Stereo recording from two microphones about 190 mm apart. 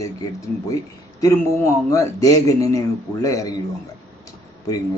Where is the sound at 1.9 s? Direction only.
15° left (ahead or behind).